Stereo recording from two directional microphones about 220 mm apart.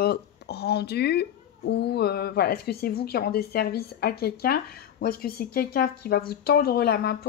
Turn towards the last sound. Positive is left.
turn(degrees=45)  # may be behind; listen again after turning